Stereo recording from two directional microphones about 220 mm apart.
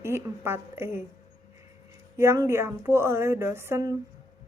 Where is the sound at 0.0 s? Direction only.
10° right (ahead or behind).